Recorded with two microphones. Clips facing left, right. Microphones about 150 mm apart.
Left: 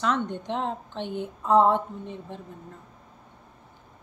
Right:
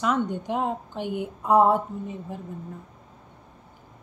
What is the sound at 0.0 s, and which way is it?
A woman's voice, 10° right (ahead or behind).